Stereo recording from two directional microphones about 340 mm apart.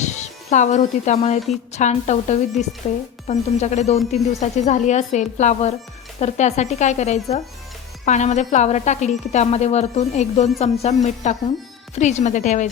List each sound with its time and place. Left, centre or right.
0.0 s a woman's voice: left